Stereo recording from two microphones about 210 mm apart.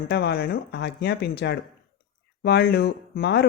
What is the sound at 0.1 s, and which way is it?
Speech, 50° left (ahead or behind).